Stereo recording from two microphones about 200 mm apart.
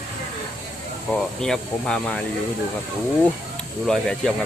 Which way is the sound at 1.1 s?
5° left (ahead or behind).